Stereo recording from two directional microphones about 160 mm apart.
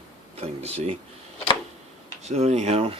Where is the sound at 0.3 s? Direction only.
40° right (ahead or behind).